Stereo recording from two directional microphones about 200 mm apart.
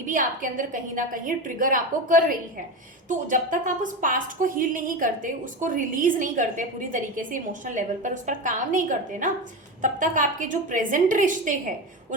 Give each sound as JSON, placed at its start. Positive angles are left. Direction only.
{"t": 0.0, "sound": "a woman's voice", "side_deg": -40}